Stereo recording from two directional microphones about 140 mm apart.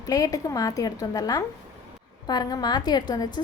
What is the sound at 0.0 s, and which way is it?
A woman's voice, 25° left (ahead or behind).